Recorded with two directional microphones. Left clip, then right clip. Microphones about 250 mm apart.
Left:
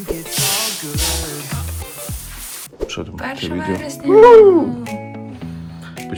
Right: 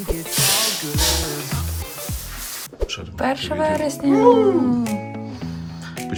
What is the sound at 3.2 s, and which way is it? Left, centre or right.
Speech, centre.